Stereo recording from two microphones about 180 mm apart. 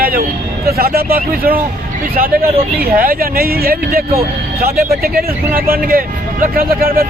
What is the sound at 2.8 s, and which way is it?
Speech, 55° right (ahead or behind).